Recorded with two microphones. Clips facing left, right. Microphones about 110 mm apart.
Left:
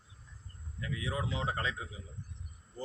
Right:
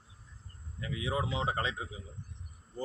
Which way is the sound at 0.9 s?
15° right (ahead or behind).